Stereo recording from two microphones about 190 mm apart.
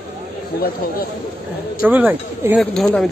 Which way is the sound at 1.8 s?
10° right (ahead or behind).